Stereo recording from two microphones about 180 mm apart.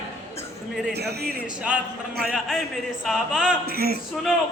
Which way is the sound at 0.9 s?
65° right (ahead or behind).